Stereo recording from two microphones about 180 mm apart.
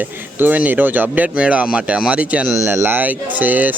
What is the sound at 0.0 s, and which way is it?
Speech, 10° right (ahead or behind).